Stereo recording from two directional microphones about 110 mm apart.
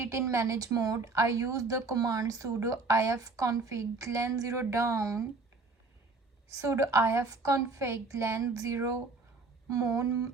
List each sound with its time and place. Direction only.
0.0 s a woman's voice: 25° right (ahead or behind)
6.5 s a woman's voice: 25° right (ahead or behind)